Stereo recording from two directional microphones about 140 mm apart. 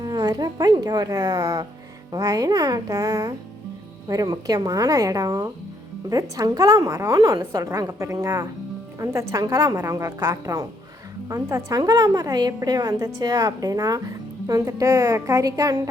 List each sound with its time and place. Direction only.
0.0 s a woman's voice: 30° right (ahead or behind)